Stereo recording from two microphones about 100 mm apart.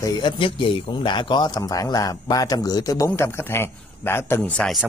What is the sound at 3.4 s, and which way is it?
A man's voice, 25° left (ahead or behind).